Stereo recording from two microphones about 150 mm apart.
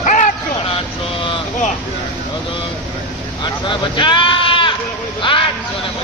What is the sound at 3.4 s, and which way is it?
Sheep, 30° left (ahead or behind).